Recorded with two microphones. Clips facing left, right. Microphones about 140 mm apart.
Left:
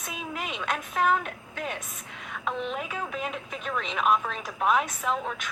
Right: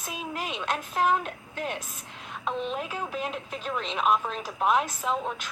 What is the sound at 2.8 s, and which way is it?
Speech, centre (ahead or behind).